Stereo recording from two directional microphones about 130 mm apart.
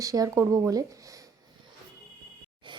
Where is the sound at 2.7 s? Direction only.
35° right (ahead or behind).